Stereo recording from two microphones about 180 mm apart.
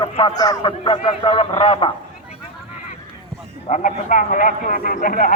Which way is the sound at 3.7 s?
45° left (ahead or behind).